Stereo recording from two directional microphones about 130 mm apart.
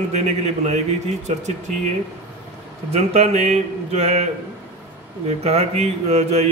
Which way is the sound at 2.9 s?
55° right (ahead or behind).